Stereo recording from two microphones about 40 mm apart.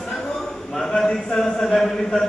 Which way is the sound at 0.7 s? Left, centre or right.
Centre.